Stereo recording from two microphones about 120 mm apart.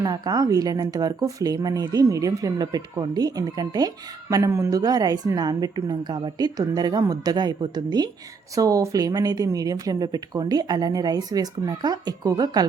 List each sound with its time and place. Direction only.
0.0 s speech: 30° right (ahead or behind)